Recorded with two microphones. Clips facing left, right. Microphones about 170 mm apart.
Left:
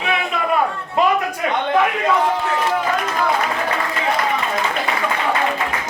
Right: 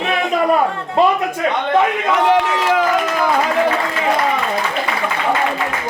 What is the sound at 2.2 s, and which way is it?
Run, 75° right (ahead or behind).